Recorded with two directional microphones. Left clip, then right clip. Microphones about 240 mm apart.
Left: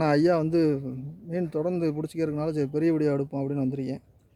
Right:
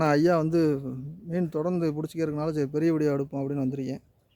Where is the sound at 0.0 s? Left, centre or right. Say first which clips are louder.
Even; centre.